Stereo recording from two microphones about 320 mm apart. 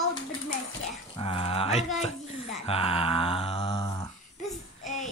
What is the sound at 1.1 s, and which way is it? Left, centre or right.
A woman's voice, centre.